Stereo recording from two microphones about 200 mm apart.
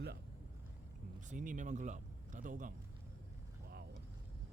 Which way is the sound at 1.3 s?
40° right (ahead or behind).